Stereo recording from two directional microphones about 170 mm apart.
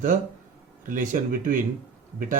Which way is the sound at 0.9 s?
50° right (ahead or behind).